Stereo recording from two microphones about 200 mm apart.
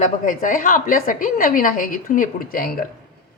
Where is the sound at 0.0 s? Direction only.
40° left (ahead or behind).